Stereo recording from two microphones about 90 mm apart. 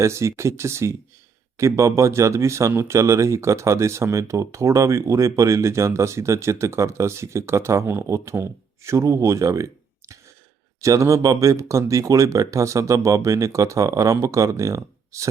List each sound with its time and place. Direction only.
0.0 s speech: 30° right (ahead or behind)
10.8 s speech: 35° right (ahead or behind)